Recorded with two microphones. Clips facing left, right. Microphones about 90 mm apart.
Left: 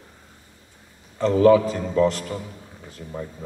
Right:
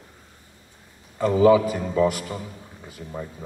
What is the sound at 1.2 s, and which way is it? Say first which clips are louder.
A man's voice: left 1 dB; 10° right (ahead or behind).